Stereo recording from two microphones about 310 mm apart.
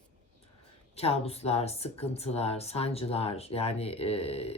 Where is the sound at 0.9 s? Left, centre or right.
Centre.